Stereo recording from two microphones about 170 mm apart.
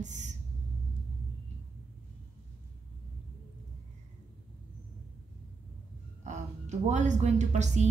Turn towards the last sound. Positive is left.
turn(degrees=-45)  # may be behind; listen again after turning